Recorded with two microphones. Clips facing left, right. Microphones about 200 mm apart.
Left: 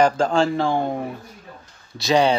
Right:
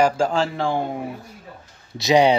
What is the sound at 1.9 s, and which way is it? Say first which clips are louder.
Speech: right 2 dB; 20° right (ahead or behind).